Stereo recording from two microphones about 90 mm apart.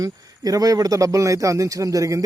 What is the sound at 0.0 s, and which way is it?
Speech, 40° right (ahead or behind).